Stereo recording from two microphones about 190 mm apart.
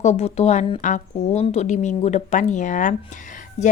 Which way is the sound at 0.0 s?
35° left (ahead or behind).